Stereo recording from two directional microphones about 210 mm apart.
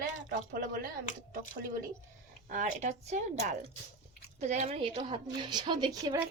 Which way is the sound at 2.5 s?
35° right (ahead or behind).